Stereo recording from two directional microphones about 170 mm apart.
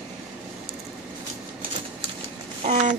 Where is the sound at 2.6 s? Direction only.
45° right (ahead or behind).